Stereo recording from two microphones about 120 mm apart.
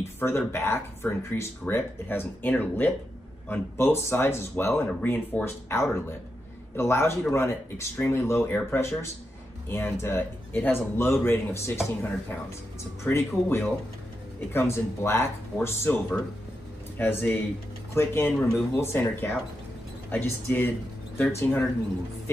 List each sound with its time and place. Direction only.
0.5 s speech: 20° left (ahead or behind)